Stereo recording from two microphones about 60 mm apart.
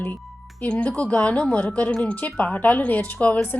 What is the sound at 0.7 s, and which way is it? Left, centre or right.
A woman's voice, centre.